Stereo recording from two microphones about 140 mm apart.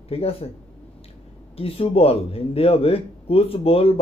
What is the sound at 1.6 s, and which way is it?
Speech, 45° left (ahead or behind).